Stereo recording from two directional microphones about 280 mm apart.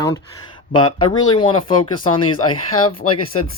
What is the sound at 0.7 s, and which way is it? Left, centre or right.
Speech, centre.